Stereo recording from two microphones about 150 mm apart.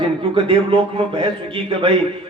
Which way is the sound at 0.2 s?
35° right (ahead or behind).